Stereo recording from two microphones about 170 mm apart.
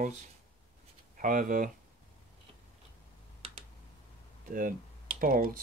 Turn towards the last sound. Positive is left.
turn(degrees=-55)  # may be behind; listen again after turning